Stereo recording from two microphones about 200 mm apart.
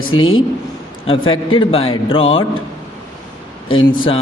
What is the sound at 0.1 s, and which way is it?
Speech, 90° left.